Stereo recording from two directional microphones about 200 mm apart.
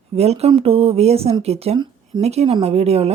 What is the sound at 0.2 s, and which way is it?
Speech, 30° right (ahead or behind).